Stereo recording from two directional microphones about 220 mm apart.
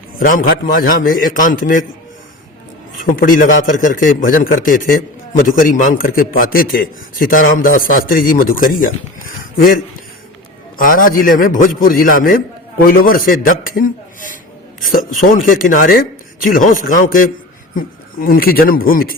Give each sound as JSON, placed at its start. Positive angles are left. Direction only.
{"t": 0.2, "sound": "a man's voice", "side_deg": 40}
{"t": 3.2, "sound": "a man's voice", "side_deg": 40}
{"t": 15.4, "sound": "a man's voice", "side_deg": 40}